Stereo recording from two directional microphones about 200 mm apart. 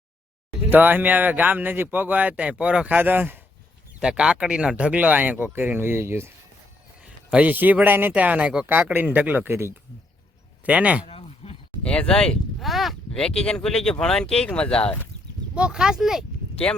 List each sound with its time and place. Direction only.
0.7 s speech: 10° right (ahead or behind)
11.0 s a sound: 30° left (ahead or behind)
11.8 s speech: 5° left (ahead or behind)